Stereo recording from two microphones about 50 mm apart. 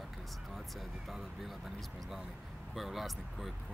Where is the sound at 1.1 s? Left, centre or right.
Centre.